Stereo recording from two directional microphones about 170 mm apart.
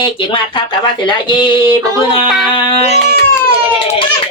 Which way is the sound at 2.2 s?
5° right (ahead or behind).